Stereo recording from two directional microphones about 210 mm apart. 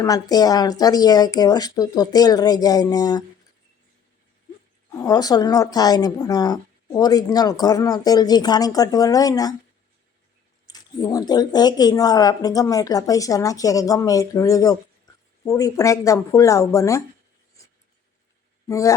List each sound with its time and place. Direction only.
0.0 s a woman's voice: 15° left (ahead or behind)
4.9 s a woman's voice: 15° left (ahead or behind)
10.7 s a woman's voice: 20° left (ahead or behind)
18.7 s a woman's voice: 15° left (ahead or behind)